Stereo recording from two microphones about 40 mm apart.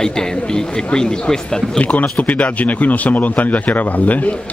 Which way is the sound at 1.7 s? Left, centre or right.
Left.